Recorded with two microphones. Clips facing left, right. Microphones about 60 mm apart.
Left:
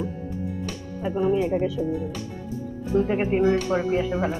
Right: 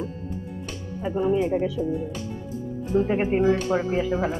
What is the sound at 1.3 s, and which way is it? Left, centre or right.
Speech, centre.